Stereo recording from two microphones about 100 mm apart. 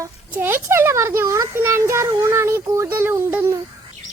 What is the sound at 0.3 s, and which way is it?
A child's voice, 20° right (ahead or behind).